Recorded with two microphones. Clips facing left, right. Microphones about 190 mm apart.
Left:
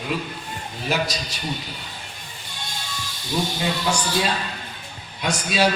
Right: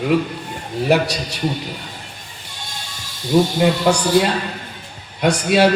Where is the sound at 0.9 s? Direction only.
65° right (ahead or behind).